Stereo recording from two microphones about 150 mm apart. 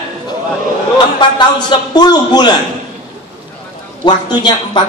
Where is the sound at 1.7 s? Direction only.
30° left (ahead or behind).